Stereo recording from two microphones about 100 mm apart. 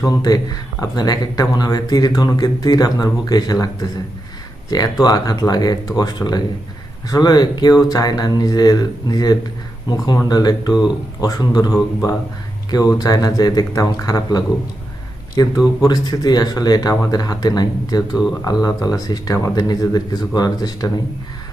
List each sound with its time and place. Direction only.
0.0 s speech: 40° left (ahead or behind)
4.7 s speech: 40° left (ahead or behind)